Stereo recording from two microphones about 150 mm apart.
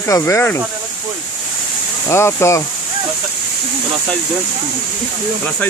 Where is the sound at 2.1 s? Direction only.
15° left (ahead or behind).